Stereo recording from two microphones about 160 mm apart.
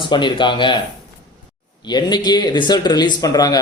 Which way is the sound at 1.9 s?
25° left (ahead or behind).